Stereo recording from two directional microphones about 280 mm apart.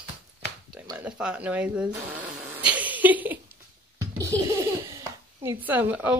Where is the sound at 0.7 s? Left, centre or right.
Centre.